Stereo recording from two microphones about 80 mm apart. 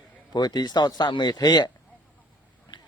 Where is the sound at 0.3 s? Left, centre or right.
Left.